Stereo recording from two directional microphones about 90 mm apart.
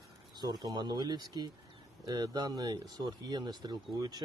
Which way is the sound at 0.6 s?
50° right (ahead or behind).